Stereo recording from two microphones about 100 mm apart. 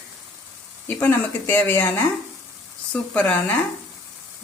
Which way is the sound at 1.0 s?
20° left (ahead or behind).